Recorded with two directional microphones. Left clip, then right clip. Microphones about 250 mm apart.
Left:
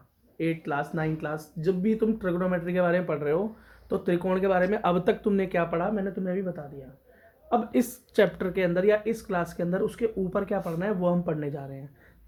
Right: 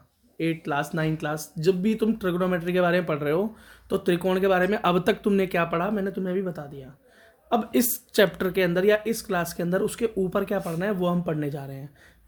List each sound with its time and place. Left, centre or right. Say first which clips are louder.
0.3 s speech: right 2 dB; right